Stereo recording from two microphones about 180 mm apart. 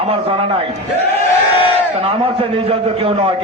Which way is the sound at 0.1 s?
30° right (ahead or behind).